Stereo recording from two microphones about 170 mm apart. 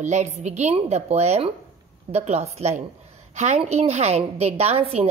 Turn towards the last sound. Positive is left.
turn(degrees=-35)  # may be behind; listen again after turning